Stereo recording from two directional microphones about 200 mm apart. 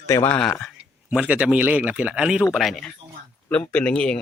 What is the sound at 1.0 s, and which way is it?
A man's voice, 5° right (ahead or behind).